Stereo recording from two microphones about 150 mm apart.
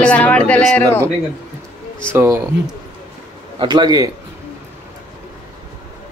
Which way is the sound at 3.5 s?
30° right (ahead or behind).